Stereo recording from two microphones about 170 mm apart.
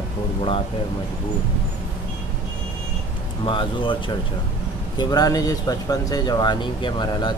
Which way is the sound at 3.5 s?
30° left (ahead or behind).